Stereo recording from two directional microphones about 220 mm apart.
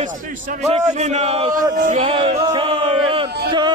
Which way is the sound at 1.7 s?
35° right (ahead or behind).